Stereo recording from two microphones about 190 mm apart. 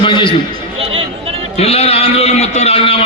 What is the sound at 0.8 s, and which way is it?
Chatter, 30° right (ahead or behind).